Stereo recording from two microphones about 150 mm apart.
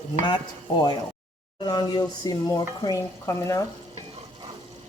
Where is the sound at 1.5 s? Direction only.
30° left (ahead or behind).